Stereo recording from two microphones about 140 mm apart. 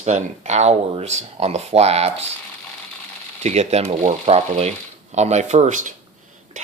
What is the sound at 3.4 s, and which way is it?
Speech, 50° right (ahead or behind).